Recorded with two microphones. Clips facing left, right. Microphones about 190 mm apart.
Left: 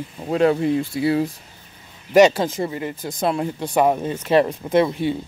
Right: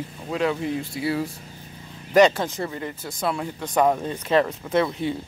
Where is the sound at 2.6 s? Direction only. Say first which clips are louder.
Left 4 dB; 15° left (ahead or behind).